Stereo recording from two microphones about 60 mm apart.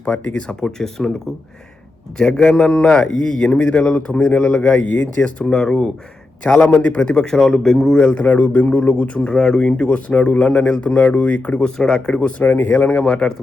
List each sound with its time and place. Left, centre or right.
0.0 s a man's voice: left
2.1 s a man's voice: centre
11.6 s a man's voice: centre
12.4 s speech: left